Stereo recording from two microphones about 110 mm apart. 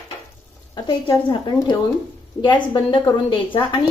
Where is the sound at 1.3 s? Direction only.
40° left (ahead or behind).